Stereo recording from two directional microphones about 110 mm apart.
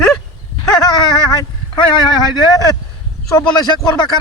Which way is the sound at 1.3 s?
35° left (ahead or behind).